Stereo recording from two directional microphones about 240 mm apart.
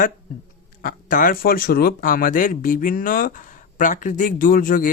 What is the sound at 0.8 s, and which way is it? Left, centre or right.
Speech, left.